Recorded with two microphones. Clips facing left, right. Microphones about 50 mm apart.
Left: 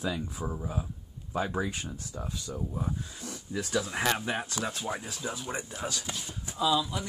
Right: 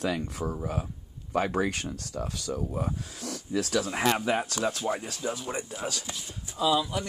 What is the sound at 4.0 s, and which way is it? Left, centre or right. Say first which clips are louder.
Speech: right 3 dB; right.